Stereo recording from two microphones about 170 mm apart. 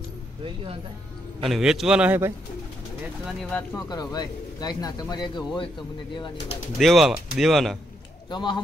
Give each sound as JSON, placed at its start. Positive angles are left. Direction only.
{"t": 1.4, "sound": "a man's voice", "side_deg": -5}
{"t": 3.7, "sound": "speech", "side_deg": 20}
{"t": 6.8, "sound": "a man's voice", "side_deg": 0}
{"t": 8.3, "sound": "speech", "side_deg": 25}